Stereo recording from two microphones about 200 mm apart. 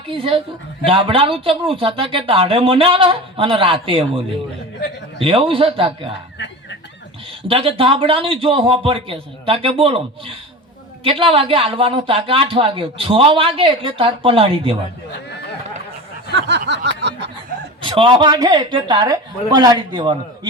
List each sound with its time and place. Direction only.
0.1 s speech: 25° right (ahead or behind)
5.2 s speech: 25° right (ahead or behind)
7.4 s speech: 25° right (ahead or behind)
16.3 s a sound: 60° right (ahead or behind)
17.8 s speech: 25° right (ahead or behind)